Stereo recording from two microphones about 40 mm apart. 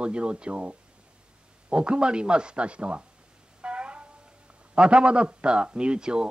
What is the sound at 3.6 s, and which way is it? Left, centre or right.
Music, right.